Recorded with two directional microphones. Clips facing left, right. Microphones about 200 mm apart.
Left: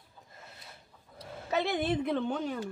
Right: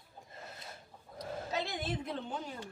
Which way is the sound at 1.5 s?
65° left (ahead or behind).